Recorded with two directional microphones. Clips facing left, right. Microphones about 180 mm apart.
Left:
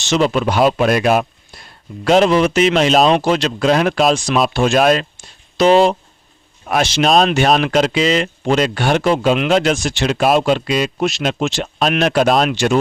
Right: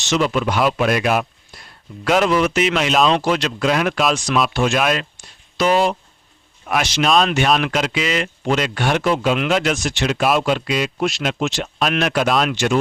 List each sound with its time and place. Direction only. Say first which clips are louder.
0.0 s speech: left 3 dB; 30° left (ahead or behind)